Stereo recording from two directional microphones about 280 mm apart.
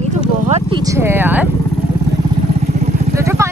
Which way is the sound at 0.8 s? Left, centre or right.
Centre.